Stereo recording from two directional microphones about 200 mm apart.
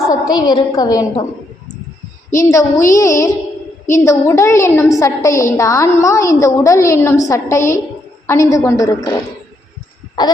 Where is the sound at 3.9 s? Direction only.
15° left (ahead or behind).